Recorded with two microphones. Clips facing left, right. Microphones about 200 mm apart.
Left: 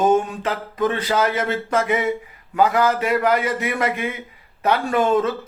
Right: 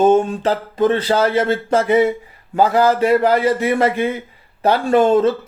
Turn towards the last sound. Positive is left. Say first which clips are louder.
# right 5 dB
turn(degrees=-30)  # may be behind; listen again after turning